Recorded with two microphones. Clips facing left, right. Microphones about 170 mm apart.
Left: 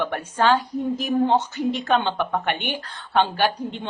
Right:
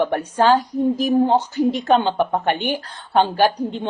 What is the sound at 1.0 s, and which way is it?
Speech, 35° right (ahead or behind).